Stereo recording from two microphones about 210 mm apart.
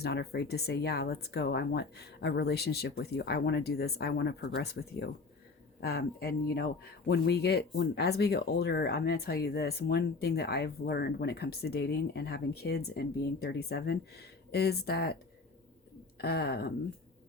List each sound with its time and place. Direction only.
0.0 s speech: 50° left (ahead or behind)